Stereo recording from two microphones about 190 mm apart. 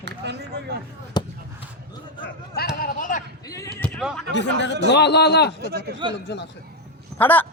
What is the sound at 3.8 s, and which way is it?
Speech, centre (ahead or behind).